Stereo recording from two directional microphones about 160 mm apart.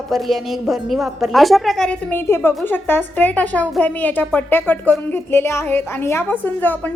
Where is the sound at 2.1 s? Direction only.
15° left (ahead or behind).